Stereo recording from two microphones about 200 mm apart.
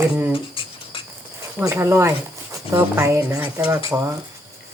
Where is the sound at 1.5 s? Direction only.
10° right (ahead or behind).